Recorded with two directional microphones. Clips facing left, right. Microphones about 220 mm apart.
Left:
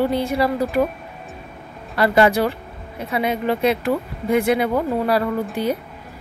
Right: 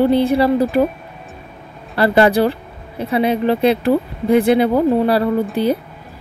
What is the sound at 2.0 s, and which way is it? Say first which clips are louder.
Speech: right 3 dB; 30° right (ahead or behind).